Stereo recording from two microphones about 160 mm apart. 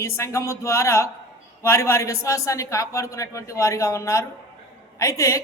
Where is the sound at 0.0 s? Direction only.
15° left (ahead or behind).